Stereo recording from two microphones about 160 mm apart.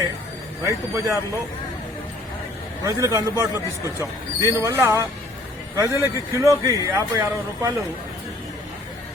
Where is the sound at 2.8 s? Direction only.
20° right (ahead or behind).